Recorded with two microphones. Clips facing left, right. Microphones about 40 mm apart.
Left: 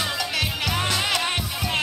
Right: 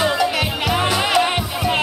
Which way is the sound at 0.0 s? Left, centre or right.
Centre.